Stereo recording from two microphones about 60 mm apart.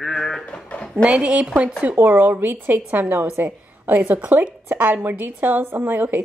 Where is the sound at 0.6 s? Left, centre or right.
Centre.